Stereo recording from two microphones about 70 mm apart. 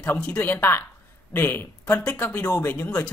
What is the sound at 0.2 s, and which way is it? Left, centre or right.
Speech, left.